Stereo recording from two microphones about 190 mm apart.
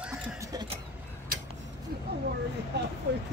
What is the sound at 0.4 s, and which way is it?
Vehicle, 20° right (ahead or behind).